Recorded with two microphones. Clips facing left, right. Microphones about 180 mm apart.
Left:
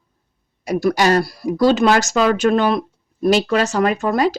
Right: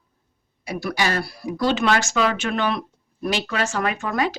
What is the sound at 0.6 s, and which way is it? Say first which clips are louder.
Speech: left 8 dB; 45° left (ahead or behind).